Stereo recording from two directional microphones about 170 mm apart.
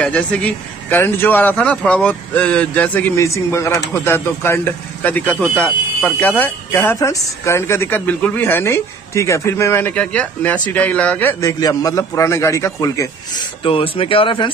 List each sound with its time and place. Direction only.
0.0 s speech: 5° left (ahead or behind)
13.7 s speech: 30° left (ahead or behind)